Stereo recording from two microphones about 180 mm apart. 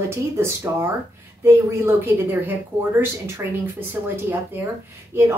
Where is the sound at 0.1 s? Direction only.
15° right (ahead or behind).